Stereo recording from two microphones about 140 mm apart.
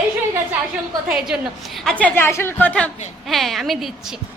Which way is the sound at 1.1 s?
5° right (ahead or behind).